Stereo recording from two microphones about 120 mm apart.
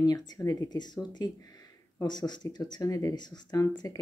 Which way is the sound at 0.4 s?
30° left (ahead or behind).